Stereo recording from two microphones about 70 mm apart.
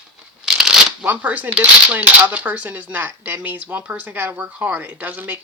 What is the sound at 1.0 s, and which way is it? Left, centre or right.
Speech, right.